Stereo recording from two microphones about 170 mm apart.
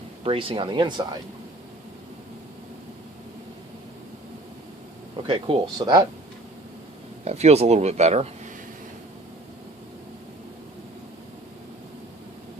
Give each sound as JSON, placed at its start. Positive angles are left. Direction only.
{"t": 0.3, "sound": "speech", "side_deg": -30}
{"t": 5.2, "sound": "speech", "side_deg": -30}
{"t": 7.3, "sound": "speech", "side_deg": -40}